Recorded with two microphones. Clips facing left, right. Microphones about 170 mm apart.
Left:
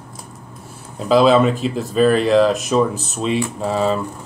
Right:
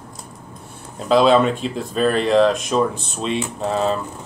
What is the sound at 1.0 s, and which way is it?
Speech, centre (ahead or behind).